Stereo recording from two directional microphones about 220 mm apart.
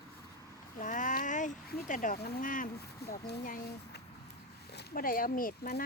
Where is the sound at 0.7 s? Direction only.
35° left (ahead or behind).